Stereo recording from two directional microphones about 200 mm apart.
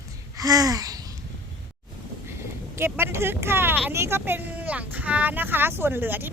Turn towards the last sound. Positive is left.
turn(degrees=-10)  # may be behind; listen again after turning